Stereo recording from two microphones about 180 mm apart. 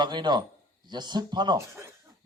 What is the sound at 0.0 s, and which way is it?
A man's voice, 25° right (ahead or behind).